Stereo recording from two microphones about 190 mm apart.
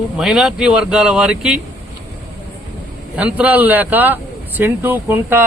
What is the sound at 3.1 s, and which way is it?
Speech, 5° right (ahead or behind).